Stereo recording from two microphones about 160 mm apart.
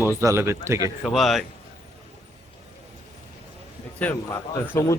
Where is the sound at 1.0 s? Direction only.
Centre (ahead or behind).